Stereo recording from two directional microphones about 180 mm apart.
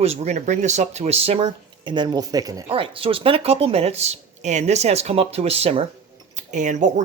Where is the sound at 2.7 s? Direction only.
30° right (ahead or behind).